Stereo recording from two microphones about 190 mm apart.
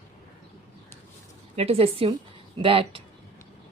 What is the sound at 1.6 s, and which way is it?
A woman's voice, 30° right (ahead or behind).